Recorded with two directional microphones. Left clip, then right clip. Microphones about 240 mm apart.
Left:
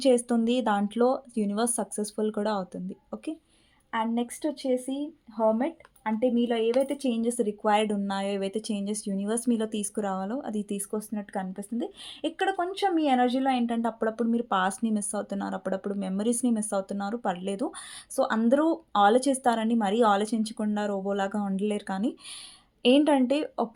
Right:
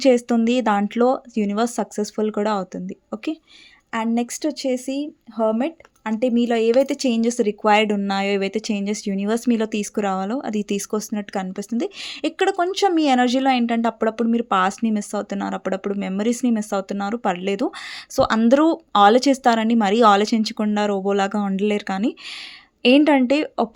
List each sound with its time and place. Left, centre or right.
0.0 s speech: right
3.9 s speech: right